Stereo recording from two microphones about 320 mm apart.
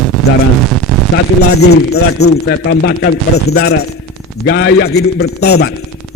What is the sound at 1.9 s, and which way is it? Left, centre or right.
Speech, left.